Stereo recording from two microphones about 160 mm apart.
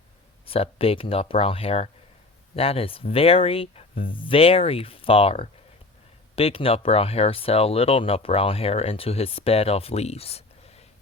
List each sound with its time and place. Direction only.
0.4 s speech: 35° left (ahead or behind)